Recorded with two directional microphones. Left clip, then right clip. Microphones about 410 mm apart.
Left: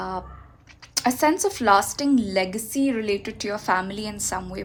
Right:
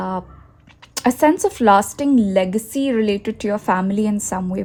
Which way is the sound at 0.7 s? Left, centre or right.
Centre.